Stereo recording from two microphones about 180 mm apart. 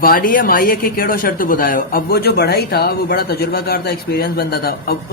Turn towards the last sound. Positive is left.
turn(degrees=60)  # may be behind; listen again after turning